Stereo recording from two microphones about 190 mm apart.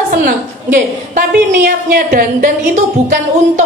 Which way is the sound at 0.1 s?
45° right (ahead or behind).